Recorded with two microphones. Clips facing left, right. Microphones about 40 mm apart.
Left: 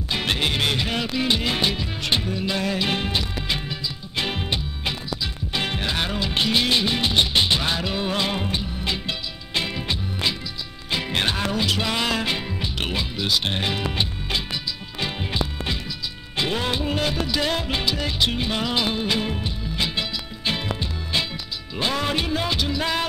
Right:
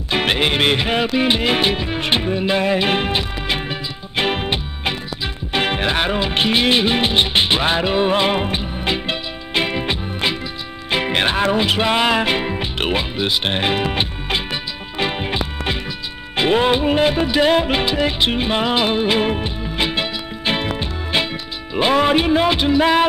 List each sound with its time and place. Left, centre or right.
0.1 s music: right